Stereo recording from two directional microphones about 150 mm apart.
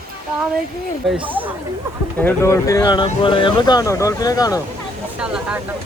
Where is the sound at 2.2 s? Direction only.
15° left (ahead or behind).